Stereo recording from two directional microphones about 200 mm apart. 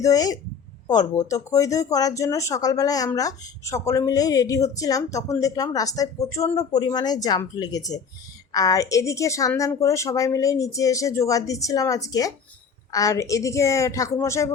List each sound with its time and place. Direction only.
0.0 s speech: 20° left (ahead or behind)